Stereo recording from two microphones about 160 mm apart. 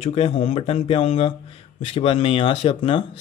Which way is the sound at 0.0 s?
40° left (ahead or behind).